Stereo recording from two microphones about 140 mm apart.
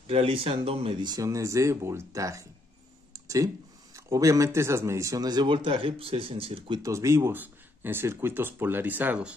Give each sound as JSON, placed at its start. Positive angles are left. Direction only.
{"t": 0.0, "sound": "speech", "side_deg": -40}
{"t": 3.1, "sound": "a sound", "side_deg": -25}
{"t": 3.9, "sound": "speech", "side_deg": -25}
{"t": 6.8, "sound": "speech", "side_deg": -20}